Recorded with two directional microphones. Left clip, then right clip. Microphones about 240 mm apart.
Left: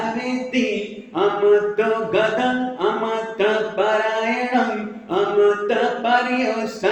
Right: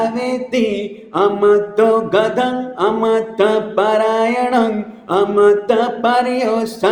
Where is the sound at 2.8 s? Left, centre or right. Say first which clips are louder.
Right 8 dB; right.